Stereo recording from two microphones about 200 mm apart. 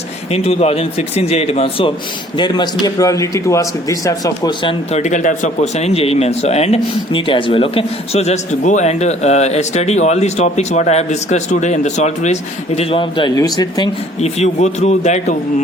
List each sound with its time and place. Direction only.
0.3 s speech: 30° left (ahead or behind)
4.9 s speech: 35° left (ahead or behind)
14.2 s speech: 35° left (ahead or behind)